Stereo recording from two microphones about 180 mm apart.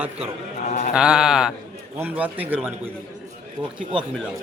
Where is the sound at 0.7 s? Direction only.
45° left (ahead or behind).